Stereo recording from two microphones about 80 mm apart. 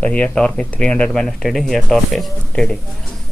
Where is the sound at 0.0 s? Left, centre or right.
Centre.